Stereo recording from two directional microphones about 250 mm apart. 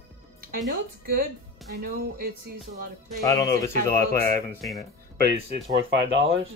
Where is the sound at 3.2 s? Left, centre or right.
Centre.